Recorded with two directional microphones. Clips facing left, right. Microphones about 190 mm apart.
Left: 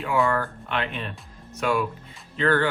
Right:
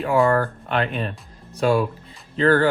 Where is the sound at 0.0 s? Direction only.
40° right (ahead or behind).